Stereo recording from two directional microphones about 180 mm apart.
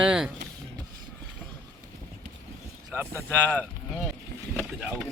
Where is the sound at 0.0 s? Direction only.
5° right (ahead or behind).